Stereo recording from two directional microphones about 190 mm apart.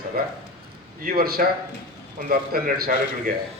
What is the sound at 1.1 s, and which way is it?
A man's voice, 55° right (ahead or behind).